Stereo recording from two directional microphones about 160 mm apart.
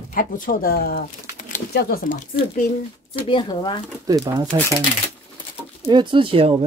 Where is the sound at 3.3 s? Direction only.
30° left (ahead or behind).